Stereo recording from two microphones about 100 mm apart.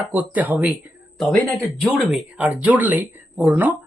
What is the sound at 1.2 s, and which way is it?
Speech, 15° left (ahead or behind).